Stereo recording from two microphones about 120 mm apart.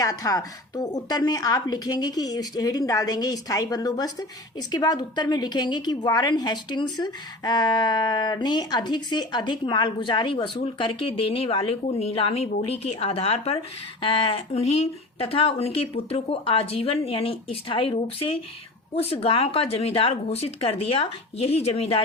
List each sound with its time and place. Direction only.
0.0 s a woman's voice: 30° left (ahead or behind); by 13.6 s 60° left (ahead or behind)
14.0 s speech: 45° left (ahead or behind)